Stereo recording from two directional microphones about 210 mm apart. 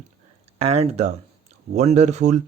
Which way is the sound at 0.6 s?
30° right (ahead or behind).